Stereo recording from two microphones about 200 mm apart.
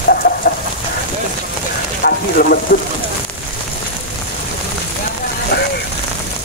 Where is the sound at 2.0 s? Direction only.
50° left (ahead or behind).